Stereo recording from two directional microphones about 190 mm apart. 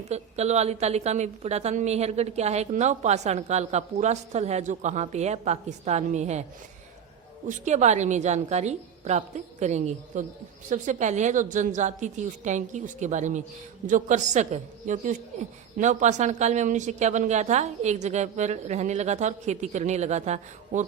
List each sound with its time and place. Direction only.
0.1 s a woman's voice: 35° right (ahead or behind)
7.4 s a woman's voice: 40° right (ahead or behind)